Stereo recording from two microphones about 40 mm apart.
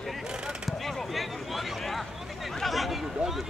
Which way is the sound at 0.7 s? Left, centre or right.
Centre.